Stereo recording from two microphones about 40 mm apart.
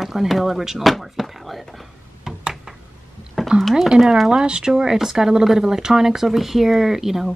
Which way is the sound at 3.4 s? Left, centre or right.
Centre.